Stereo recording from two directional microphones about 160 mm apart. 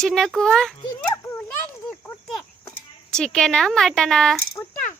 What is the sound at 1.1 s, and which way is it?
Children playing, 15° left (ahead or behind).